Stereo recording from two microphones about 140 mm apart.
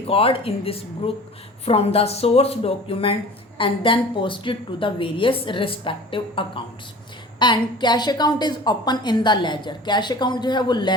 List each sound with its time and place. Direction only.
0.1 s a woman's voice: 40° left (ahead or behind)